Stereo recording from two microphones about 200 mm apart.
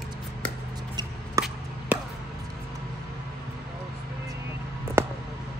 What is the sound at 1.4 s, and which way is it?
Chop, 15° right (ahead or behind).